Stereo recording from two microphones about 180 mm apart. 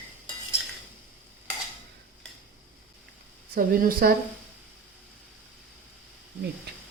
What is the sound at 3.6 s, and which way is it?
Speech, 50° right (ahead or behind).